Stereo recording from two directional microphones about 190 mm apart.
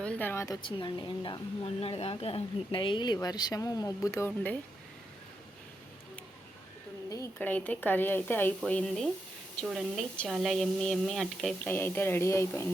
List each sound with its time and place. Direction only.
0.0 s a woman's voice: 10° left (ahead or behind)
7.1 s speech: 15° left (ahead or behind)